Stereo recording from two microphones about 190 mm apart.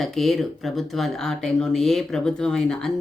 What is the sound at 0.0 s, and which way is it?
Speech, centre (ahead or behind).